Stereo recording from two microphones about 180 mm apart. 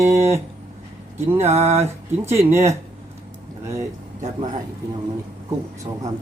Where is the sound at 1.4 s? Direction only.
35° right (ahead or behind).